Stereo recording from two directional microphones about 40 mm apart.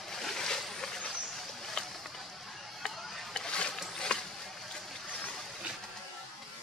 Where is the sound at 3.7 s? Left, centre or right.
Centre.